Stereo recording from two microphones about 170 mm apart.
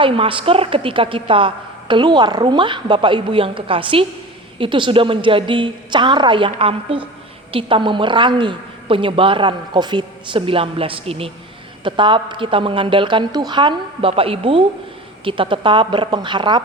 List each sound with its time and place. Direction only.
0.0 s a woman's voice: 30° right (ahead or behind)